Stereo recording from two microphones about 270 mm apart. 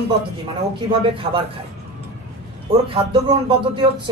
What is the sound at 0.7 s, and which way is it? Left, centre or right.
Speech, centre.